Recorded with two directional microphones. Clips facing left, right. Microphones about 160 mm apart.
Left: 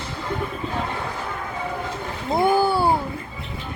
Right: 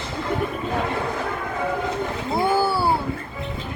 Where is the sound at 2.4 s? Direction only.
20° left (ahead or behind).